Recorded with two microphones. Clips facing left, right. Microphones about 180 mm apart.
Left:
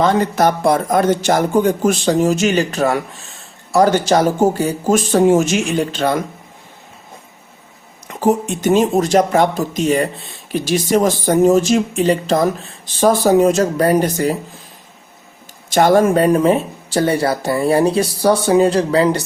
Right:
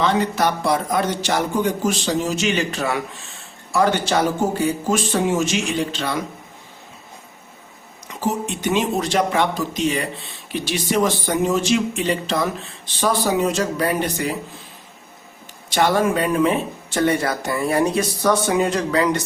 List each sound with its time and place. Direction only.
0.0 s speech: 45° left (ahead or behind)
8.2 s speech: 50° left (ahead or behind)
15.7 s speech: 45° left (ahead or behind)